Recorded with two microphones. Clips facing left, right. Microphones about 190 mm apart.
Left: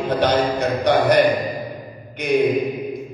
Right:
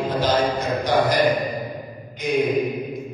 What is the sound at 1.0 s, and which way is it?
A man's voice, 65° left (ahead or behind).